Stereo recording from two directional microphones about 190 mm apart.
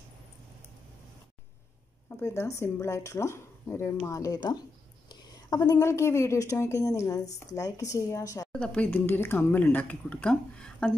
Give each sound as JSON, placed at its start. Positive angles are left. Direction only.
{"t": 2.0, "sound": "speech", "side_deg": 15}
{"t": 8.5, "sound": "speech", "side_deg": 5}